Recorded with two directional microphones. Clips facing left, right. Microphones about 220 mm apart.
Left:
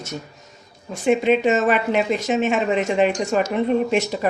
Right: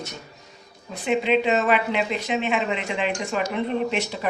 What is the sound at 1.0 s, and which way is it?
Speech, 45° left (ahead or behind).